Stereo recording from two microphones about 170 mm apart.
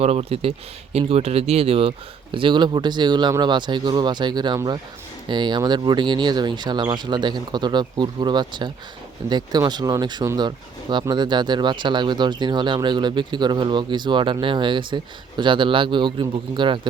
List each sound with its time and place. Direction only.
0.0 s speech: 35° right (ahead or behind)